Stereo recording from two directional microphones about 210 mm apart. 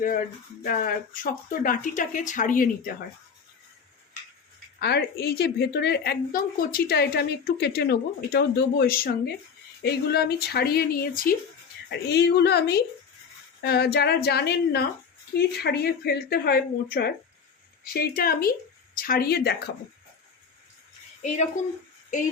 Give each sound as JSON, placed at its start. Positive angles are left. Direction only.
{"t": 0.6, "sound": "speech", "side_deg": 45}
{"t": 4.8, "sound": "a woman's voice", "side_deg": 50}
{"t": 11.9, "sound": "a woman's voice", "side_deg": 50}
{"t": 21.2, "sound": "speech", "side_deg": 35}